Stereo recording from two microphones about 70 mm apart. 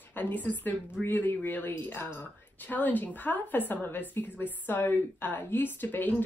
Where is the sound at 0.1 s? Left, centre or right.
Left.